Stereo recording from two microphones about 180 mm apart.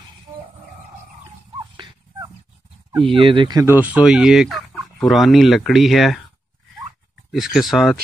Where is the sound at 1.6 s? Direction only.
25° right (ahead or behind).